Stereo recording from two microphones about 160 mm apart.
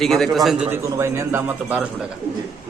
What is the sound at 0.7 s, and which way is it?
Speech, 15° right (ahead or behind).